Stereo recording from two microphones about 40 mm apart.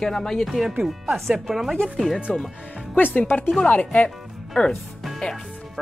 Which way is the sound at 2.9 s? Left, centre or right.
Left.